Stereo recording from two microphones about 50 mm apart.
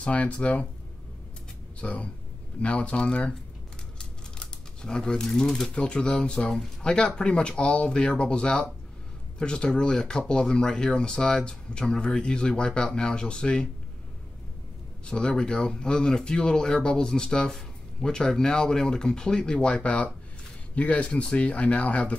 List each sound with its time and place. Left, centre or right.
0.0 s speech: left
1.8 s speech: left
4.0 s a sound: centre
5.8 s a man's voice: left
15.0 s a man's voice: centre
19.5 s speech: left